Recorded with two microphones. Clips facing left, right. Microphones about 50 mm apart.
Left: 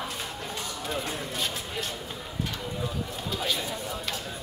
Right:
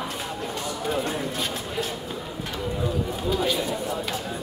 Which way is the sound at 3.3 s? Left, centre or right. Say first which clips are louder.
Right 5 dB; centre.